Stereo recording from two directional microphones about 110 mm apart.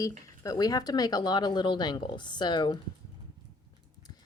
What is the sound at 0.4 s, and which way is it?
A woman's voice, 35° left (ahead or behind).